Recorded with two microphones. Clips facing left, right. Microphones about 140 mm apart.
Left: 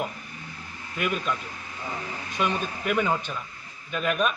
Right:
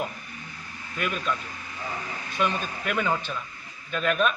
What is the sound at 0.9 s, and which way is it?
Speech, 5° left (ahead or behind).